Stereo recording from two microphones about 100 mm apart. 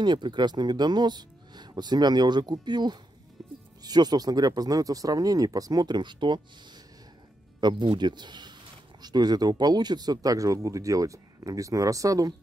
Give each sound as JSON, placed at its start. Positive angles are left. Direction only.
{"t": 0.0, "sound": "speech", "side_deg": -50}
{"t": 7.6, "sound": "speech", "side_deg": -50}